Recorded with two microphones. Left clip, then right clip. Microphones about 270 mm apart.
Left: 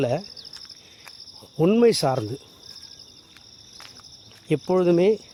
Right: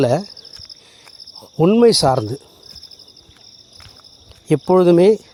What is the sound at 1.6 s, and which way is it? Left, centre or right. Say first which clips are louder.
Speech: right 6 dB; centre.